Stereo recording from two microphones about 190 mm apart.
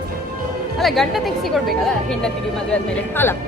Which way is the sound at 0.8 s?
Centre (ahead or behind).